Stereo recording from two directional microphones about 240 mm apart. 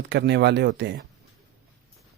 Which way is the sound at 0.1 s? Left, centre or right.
Right.